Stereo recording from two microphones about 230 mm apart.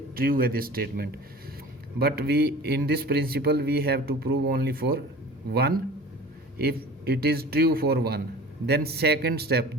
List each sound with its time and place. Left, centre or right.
0.2 s speech: right